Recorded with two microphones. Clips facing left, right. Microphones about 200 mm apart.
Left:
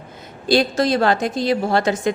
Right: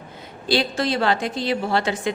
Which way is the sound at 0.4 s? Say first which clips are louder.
Left 5 dB; 45° left (ahead or behind).